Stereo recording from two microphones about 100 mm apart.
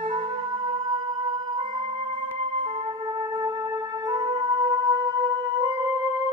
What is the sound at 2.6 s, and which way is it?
Emergency vehicle, 55° right (ahead or behind).